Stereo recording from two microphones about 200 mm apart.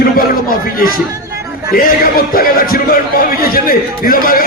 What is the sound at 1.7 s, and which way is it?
A man's voice, 45° left (ahead or behind).